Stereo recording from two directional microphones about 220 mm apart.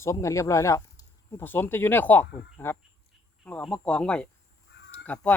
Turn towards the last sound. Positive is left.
turn(degrees=5)  # may be behind; listen again after turning